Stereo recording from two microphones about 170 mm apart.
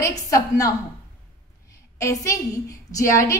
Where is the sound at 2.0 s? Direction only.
20° left (ahead or behind).